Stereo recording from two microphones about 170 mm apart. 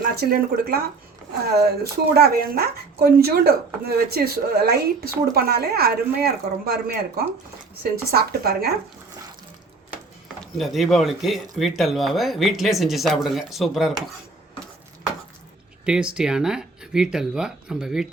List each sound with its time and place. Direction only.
0.2 s speech: 60° right (ahead or behind)
10.4 s speech: centre (ahead or behind)
15.9 s speech: 5° right (ahead or behind)